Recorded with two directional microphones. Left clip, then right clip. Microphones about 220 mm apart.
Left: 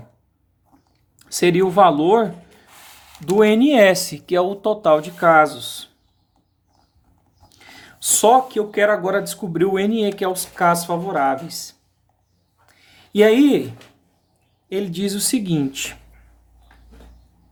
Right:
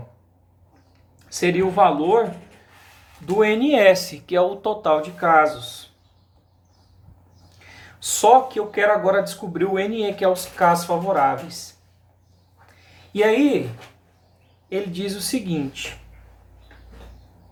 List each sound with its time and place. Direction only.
1.2 s speech: 50° left (ahead or behind)
3.2 s speech: 50° left (ahead or behind)
7.5 s speech: 50° left (ahead or behind)
13.1 s speech: 50° left (ahead or behind)
14.7 s speech: 50° left (ahead or behind)